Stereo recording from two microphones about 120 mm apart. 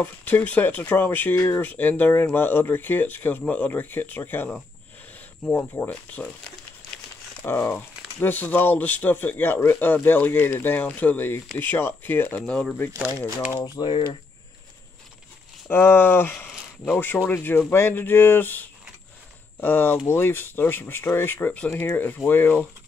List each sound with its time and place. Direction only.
0.0 s speech: 15° left (ahead or behind)
7.4 s speech: 20° left (ahead or behind)
13.7 s speech: 45° left (ahead or behind)
15.7 s speech: 20° left (ahead or behind)